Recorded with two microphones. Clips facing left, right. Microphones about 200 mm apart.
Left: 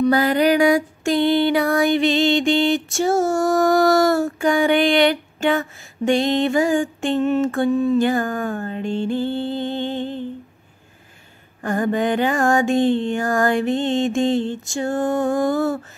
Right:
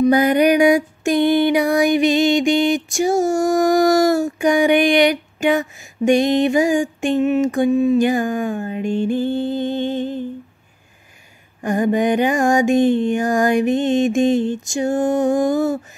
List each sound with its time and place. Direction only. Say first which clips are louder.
0.0 s music: right 3 dB; 20° right (ahead or behind)
11.6 s music: right 3 dB; 15° right (ahead or behind)